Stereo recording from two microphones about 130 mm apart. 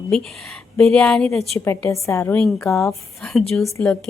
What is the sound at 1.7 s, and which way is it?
Speech, 20° left (ahead or behind).